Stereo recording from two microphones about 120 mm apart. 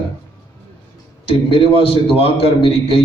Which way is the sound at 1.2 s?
50° left (ahead or behind).